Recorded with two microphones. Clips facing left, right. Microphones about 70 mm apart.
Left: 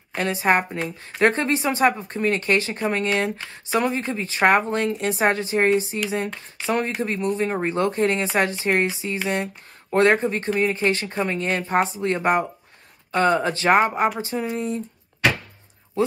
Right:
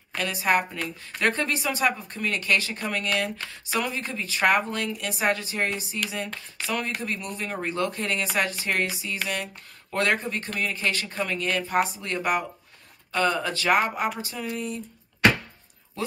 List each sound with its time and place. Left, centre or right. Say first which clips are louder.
0.1 s speech: left 4 dB; left
16.0 s speech: left 9 dB; left